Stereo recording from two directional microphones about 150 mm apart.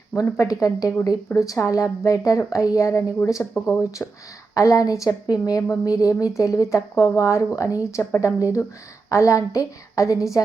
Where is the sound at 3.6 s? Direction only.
5° right (ahead or behind).